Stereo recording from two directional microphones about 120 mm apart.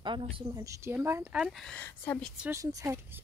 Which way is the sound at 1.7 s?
15° left (ahead or behind).